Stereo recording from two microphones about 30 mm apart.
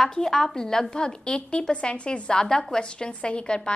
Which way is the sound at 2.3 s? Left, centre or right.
Left.